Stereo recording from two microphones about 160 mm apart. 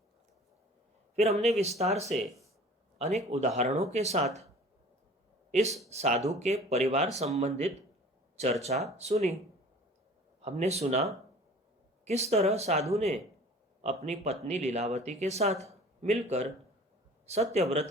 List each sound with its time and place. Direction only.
1.1 s a man's voice: 40° right (ahead or behind)
2.0 s speech: centre (ahead or behind)
3.0 s speech: 45° right (ahead or behind)
5.6 s speech: centre (ahead or behind)
5.9 s speech: 45° right (ahead or behind)
10.4 s speech: 45° right (ahead or behind)
12.0 s speech: 40° right (ahead or behind)